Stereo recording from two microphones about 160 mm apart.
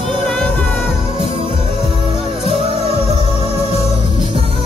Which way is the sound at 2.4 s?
35° right (ahead or behind).